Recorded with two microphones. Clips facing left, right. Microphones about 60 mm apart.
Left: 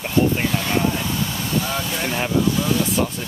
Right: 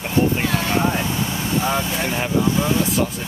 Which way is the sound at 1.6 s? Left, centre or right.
Right.